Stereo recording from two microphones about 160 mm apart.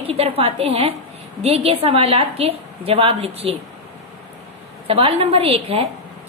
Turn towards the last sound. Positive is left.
turn(degrees=-40)  # may be behind; listen again after turning